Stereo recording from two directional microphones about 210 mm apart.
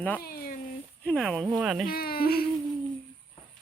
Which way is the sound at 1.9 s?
45° left (ahead or behind).